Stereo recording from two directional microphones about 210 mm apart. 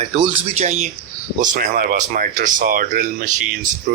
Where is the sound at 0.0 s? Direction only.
30° right (ahead or behind).